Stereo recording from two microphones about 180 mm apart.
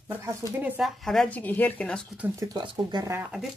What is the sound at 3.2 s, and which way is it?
Speech, 5° right (ahead or behind).